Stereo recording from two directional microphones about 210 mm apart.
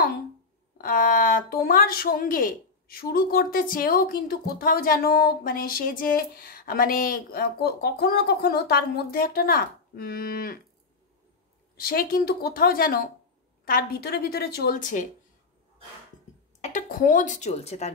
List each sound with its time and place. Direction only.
0.7 s a woman's voice: 40° left (ahead or behind)
11.7 s a woman's voice: 45° left (ahead or behind)
16.6 s a woman's voice: 35° left (ahead or behind)